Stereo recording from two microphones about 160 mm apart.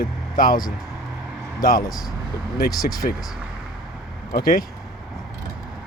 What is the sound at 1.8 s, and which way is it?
Speech, 25° left (ahead or behind).